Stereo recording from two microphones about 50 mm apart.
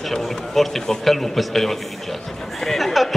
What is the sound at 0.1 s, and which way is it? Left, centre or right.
A man's voice, centre.